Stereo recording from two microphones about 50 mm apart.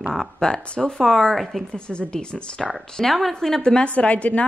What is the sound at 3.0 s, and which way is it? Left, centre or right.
A woman's voice, centre.